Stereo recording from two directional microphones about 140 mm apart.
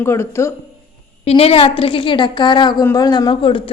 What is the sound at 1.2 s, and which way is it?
A woman's voice, 45° left (ahead or behind).